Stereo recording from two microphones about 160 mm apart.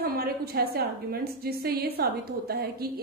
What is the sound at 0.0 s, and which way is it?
A woman's voice, 70° right (ahead or behind).